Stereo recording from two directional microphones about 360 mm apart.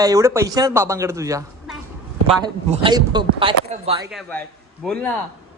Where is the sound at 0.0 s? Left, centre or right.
Centre.